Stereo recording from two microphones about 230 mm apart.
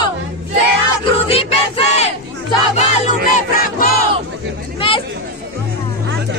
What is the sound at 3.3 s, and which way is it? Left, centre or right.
Music, left.